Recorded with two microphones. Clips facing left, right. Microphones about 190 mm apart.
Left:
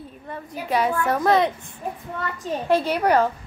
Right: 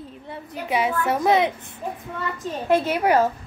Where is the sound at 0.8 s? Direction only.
5° right (ahead or behind).